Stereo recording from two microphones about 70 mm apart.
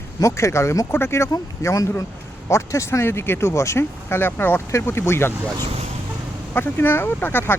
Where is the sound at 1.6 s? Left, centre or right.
Left.